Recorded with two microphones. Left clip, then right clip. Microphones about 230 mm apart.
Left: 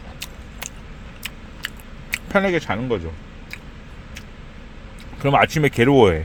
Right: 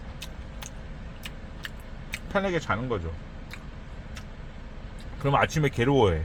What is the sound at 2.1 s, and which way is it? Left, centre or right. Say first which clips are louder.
Speech: left 8 dB; left.